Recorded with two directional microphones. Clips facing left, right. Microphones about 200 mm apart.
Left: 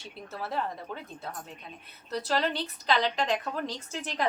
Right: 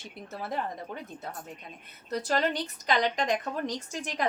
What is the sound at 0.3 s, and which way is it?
Speech, 20° right (ahead or behind).